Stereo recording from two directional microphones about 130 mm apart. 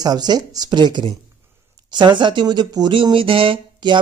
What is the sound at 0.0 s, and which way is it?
Speech, 30° right (ahead or behind).